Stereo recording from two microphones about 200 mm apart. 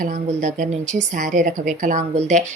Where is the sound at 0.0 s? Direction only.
40° right (ahead or behind).